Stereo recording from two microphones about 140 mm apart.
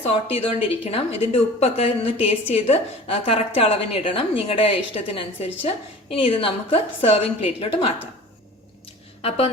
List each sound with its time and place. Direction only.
0.0 s a woman's voice: 45° left (ahead or behind)